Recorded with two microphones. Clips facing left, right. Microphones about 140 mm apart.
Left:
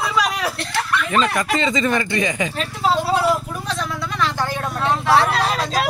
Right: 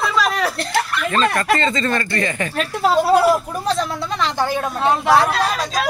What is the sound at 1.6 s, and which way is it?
Speech, 15° left (ahead or behind).